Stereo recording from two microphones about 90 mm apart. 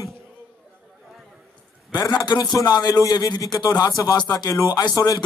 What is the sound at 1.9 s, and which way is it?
A man's voice, 45° left (ahead or behind).